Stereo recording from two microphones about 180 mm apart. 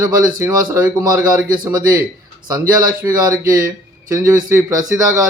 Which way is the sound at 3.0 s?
20° right (ahead or behind).